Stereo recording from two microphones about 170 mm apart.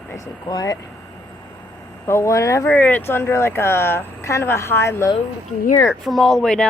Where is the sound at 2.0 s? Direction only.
15° left (ahead or behind).